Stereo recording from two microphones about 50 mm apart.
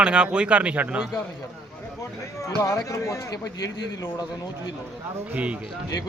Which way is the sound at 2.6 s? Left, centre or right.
Left.